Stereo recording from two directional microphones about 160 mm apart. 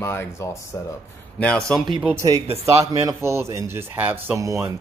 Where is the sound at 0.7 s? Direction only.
20° left (ahead or behind).